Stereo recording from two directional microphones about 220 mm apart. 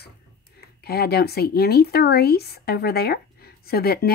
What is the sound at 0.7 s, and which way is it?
Speech, 45° left (ahead or behind).